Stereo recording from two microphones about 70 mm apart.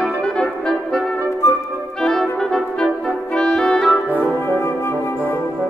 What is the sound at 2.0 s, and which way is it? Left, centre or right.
Clarinet, centre.